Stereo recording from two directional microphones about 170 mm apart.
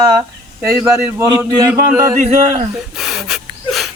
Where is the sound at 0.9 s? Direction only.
20° right (ahead or behind).